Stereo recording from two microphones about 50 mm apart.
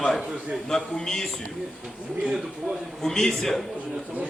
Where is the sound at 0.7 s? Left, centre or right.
Centre.